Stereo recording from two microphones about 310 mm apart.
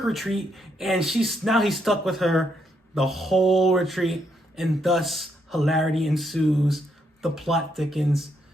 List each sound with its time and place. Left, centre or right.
0.0 s speech: centre